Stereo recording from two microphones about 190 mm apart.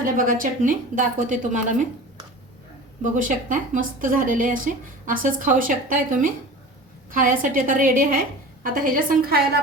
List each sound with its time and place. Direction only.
0.0 s a woman's voice: 45° right (ahead or behind)
3.0 s a woman's voice: 45° right (ahead or behind)